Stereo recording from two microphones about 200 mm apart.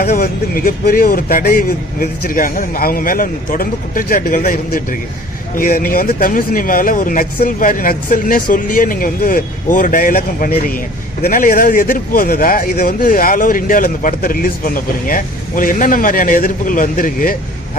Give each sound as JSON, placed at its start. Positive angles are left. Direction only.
{"t": 0.0, "sound": "speech", "side_deg": 50}